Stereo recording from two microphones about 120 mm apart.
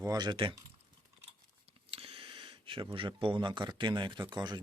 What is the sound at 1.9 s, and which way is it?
Speech, 50° right (ahead or behind).